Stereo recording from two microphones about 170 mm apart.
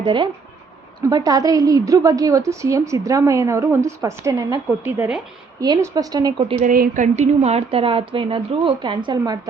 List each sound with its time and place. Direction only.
0.0 s a woman's voice: 30° right (ahead or behind); by 5.2 s 10° right (ahead or behind)
5.5 s a woman's voice: 20° right (ahead or behind)
6.6 s a woman's voice: 55° right (ahead or behind); by 9.4 s 25° right (ahead or behind)